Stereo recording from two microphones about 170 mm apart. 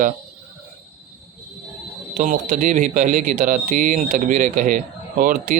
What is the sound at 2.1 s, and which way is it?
Speech, 50° right (ahead or behind).